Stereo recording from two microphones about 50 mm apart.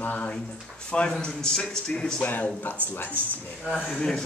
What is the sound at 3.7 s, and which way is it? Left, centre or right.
Speech, right.